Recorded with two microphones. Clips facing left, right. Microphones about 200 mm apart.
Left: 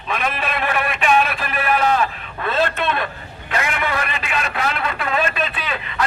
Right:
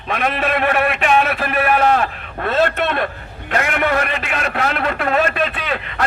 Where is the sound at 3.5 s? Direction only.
50° right (ahead or behind).